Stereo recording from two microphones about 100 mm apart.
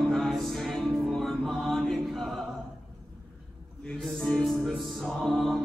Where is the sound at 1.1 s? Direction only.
5° left (ahead or behind).